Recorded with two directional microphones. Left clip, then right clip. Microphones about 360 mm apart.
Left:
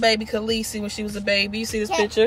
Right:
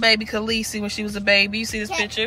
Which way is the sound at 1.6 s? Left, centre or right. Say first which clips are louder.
Left 2 dB; left.